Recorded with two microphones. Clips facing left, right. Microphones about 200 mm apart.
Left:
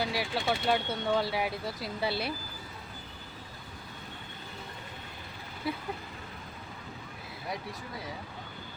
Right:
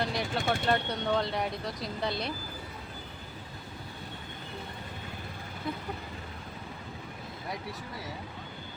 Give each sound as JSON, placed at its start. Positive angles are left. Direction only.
{"t": 0.0, "sound": "speech", "side_deg": 5}
{"t": 5.7, "sound": "speech", "side_deg": 5}